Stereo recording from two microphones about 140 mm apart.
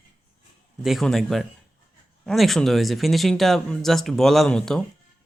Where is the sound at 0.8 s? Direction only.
Centre (ahead or behind).